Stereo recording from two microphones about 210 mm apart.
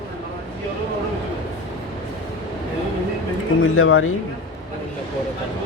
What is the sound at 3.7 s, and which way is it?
Speech, 75° left (ahead or behind).